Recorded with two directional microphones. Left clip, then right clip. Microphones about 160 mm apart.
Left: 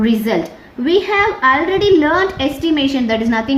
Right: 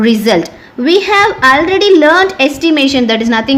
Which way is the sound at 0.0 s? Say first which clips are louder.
Right 7 dB; 65° right (ahead or behind).